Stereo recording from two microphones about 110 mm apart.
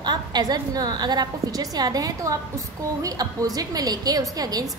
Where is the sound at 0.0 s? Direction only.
40° right (ahead or behind).